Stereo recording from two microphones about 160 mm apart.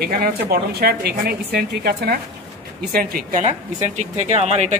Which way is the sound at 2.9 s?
65° right (ahead or behind).